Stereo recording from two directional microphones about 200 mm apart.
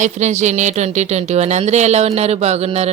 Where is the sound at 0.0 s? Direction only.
35° right (ahead or behind).